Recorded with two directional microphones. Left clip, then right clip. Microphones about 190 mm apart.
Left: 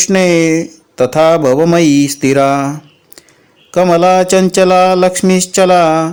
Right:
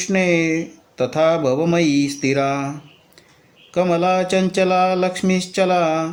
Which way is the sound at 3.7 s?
40° left (ahead or behind).